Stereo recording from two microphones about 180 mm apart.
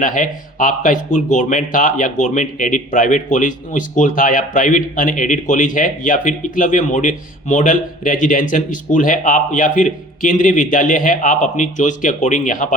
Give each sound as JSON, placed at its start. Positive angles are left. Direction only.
{"t": 0.0, "sound": "speech", "side_deg": 45}